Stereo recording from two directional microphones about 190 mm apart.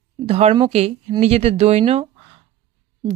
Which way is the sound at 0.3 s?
30° right (ahead or behind).